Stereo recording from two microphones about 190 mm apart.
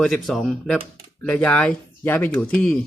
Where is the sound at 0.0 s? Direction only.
Centre (ahead or behind).